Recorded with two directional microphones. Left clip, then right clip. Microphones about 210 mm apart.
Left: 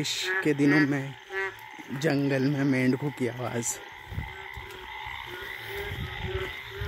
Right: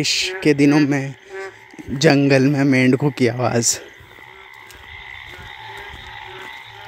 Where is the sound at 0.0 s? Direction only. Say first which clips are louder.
Right 9 dB; 40° right (ahead or behind).